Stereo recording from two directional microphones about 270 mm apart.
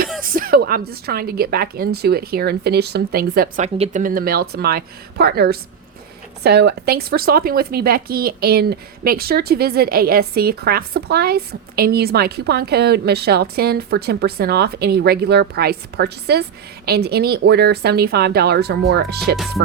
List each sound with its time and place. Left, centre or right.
0.2 s a woman's voice: right